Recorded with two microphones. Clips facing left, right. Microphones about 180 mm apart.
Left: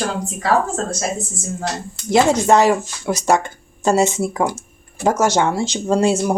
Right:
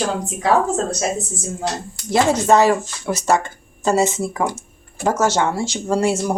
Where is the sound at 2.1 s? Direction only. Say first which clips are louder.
Left 1 dB; 15° left (ahead or behind).